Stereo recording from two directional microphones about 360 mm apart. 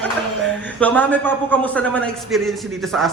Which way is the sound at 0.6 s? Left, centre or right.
Centre.